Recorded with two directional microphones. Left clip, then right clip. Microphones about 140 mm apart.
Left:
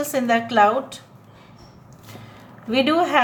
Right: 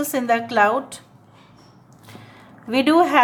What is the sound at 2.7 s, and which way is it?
Speech, 35° right (ahead or behind).